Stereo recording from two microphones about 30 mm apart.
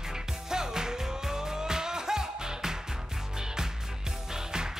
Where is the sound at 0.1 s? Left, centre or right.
Centre.